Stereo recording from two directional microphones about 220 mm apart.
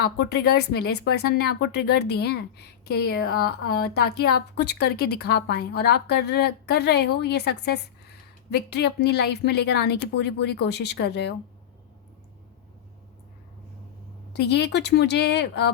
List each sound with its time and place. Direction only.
0.0 s speech: 45° left (ahead or behind)
14.3 s speech: 50° left (ahead or behind)